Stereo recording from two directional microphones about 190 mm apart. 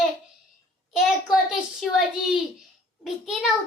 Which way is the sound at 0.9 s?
Centre (ahead or behind).